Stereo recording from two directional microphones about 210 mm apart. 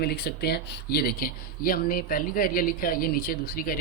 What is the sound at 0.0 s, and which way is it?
Speech, 50° left (ahead or behind).